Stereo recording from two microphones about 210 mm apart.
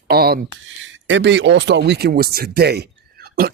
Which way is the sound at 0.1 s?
45° right (ahead or behind).